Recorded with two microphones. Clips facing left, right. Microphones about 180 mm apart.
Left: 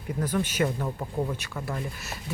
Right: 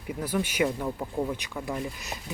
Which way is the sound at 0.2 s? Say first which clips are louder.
Even; 10° right (ahead or behind).